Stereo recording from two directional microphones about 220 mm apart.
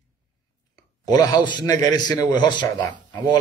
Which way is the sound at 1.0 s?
15° left (ahead or behind).